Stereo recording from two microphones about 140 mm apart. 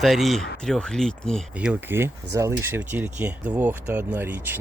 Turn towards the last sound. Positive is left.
turn(degrees=-15)  # may be behind; listen again after turning